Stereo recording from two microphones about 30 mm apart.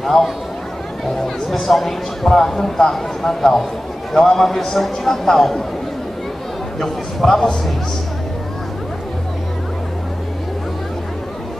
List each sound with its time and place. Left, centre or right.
0.0 s speech: centre
6.8 s speech: centre